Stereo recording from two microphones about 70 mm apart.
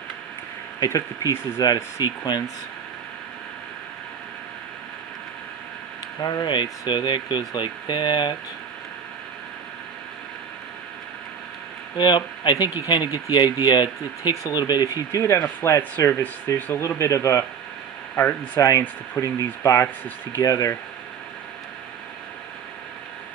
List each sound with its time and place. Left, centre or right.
0.8 s speech: left
1.6 s speech: left
2.0 s speech: right
6.2 s speech: left
7.0 s speech: left
12.0 s speech: left
15.0 s speech: left
16.5 s speech: left
17.0 s speech: left
18.1 s speech: left
18.6 s speech: left